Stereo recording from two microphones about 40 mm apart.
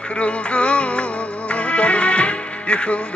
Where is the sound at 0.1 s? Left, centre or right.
Left.